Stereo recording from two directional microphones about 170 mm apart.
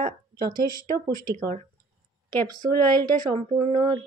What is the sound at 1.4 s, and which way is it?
Speech, 55° right (ahead or behind).